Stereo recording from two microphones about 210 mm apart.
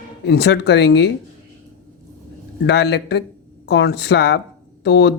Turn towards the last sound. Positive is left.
turn(degrees=55)  # may be behind; listen again after turning